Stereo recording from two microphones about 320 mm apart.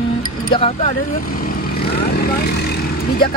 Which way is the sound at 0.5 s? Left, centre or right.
Centre.